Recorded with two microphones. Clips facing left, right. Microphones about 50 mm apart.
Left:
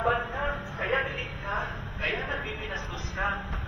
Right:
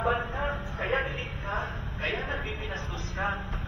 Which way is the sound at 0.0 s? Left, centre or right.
Centre.